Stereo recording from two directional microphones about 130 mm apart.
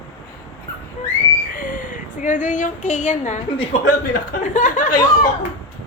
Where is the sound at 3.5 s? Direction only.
45° left (ahead or behind).